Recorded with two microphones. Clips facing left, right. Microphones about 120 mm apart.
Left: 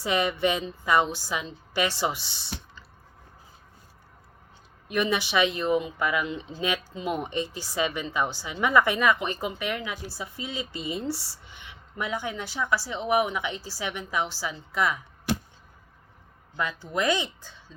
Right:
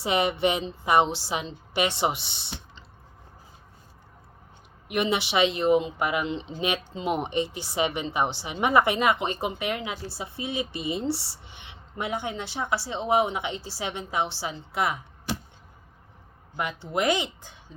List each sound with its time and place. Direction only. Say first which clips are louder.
0.0 s speech: right 1 dB; 20° right (ahead or behind)
4.9 s speech: even; 25° right (ahead or behind)
16.6 s speech: right 1 dB; 20° right (ahead or behind)